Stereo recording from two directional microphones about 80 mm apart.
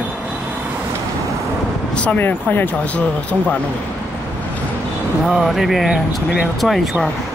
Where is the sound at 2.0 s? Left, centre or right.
Left.